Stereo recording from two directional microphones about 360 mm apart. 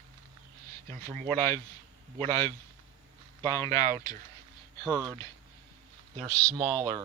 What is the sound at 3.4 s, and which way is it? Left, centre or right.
Speech, centre.